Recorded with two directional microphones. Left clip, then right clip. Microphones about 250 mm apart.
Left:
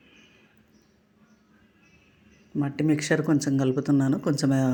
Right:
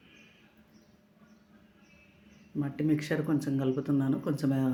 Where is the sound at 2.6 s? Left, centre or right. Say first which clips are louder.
Left 5 dB; left.